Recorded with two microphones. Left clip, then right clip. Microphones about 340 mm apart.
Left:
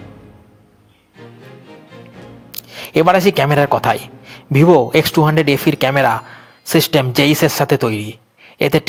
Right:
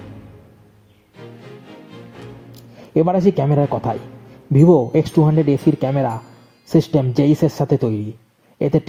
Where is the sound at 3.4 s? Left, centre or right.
Left.